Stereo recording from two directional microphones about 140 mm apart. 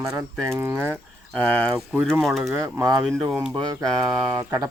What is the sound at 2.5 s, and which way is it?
Speech, 20° right (ahead or behind).